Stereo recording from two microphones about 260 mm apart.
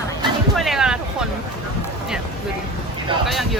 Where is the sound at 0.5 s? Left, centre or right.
Centre.